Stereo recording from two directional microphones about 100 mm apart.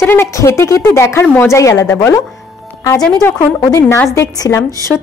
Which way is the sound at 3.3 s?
25° left (ahead or behind).